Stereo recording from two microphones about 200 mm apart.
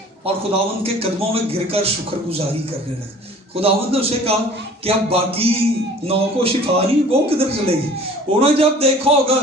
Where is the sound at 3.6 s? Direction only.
30° right (ahead or behind).